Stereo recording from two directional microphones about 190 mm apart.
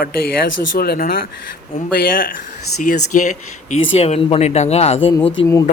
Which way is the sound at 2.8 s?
40° left (ahead or behind).